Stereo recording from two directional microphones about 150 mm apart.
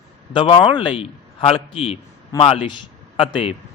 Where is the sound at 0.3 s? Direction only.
35° left (ahead or behind).